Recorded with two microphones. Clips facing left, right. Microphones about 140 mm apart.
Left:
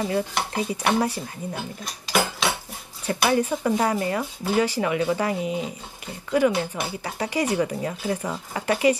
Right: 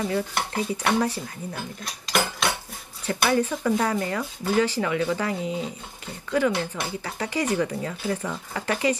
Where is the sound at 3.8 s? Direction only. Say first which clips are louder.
Left 2 dB; 30° left (ahead or behind).